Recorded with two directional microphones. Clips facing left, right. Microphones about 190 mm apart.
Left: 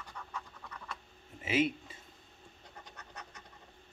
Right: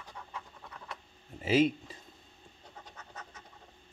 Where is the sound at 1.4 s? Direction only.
35° right (ahead or behind).